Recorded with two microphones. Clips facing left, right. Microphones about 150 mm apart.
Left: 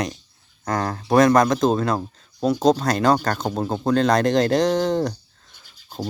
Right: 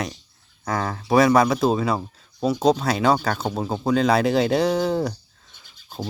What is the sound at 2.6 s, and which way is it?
Speech, 5° right (ahead or behind).